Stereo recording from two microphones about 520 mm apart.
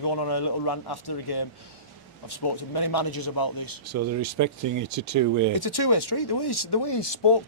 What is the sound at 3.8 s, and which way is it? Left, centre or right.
Speech, right.